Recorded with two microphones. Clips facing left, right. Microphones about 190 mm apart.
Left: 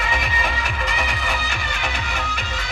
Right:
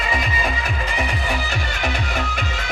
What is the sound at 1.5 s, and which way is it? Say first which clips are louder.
Music: right 3 dB; 45° right (ahead or behind).